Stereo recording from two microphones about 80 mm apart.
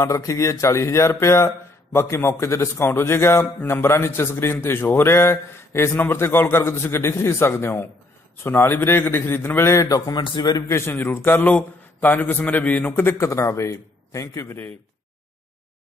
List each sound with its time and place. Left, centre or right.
0.0 s a man's voice: left
9.6 s a man's voice: left
10.7 s a man's voice: left